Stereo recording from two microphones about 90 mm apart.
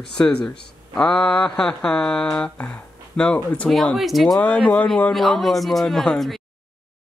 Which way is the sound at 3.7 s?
Centre (ahead or behind).